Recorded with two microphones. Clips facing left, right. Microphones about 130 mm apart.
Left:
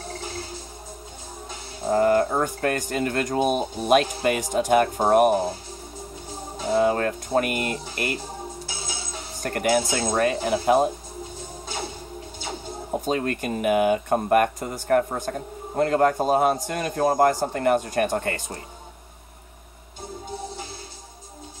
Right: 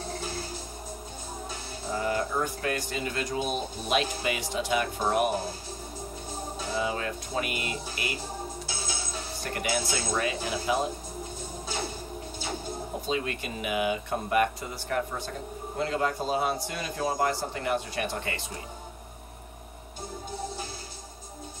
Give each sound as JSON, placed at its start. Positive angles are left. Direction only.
{"t": 1.9, "sound": "speech", "side_deg": 55}
{"t": 6.7, "sound": "speech", "side_deg": 55}
{"t": 9.4, "sound": "speech", "side_deg": 50}
{"t": 13.0, "sound": "speech", "side_deg": 50}